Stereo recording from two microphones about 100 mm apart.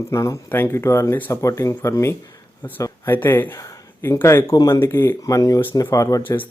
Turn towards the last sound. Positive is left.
turn(degrees=35)  # may be behind; listen again after turning